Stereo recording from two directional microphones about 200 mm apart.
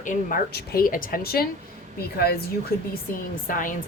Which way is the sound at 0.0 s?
40° left (ahead or behind).